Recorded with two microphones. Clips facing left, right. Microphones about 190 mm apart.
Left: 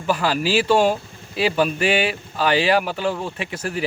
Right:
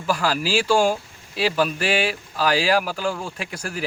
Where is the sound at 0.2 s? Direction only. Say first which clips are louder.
Left 2 dB; 5° left (ahead or behind).